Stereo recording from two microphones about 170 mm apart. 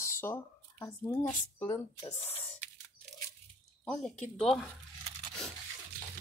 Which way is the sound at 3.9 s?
5° left (ahead or behind).